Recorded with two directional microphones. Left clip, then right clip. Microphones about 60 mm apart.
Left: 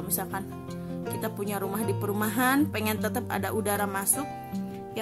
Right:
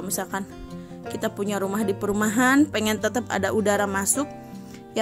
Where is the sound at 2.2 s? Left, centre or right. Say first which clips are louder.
Right 6 dB; right.